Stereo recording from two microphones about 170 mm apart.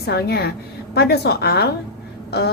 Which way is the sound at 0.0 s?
70° left (ahead or behind).